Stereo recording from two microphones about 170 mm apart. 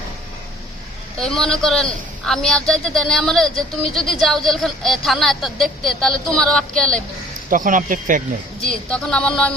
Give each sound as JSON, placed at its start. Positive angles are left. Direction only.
{"t": 1.2, "sound": "speech", "side_deg": 5}
{"t": 7.5, "sound": "speech", "side_deg": -50}
{"t": 8.9, "sound": "speech", "side_deg": 5}